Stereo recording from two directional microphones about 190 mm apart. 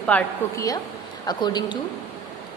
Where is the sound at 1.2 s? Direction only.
20° left (ahead or behind).